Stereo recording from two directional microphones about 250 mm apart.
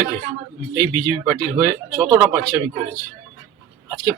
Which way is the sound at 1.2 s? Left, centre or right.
Centre.